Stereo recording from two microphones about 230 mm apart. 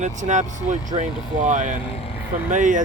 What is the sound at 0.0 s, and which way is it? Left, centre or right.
Speech, right.